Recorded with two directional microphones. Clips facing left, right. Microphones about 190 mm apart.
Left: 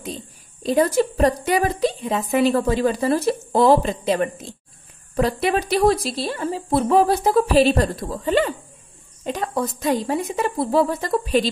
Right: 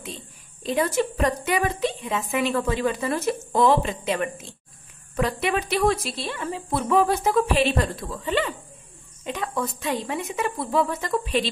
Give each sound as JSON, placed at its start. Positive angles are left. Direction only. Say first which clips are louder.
{"t": 0.6, "sound": "a woman's voice", "louder": "left 5 dB", "side_deg": 40}